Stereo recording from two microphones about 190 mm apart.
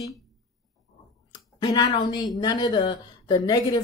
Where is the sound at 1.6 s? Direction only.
25° left (ahead or behind).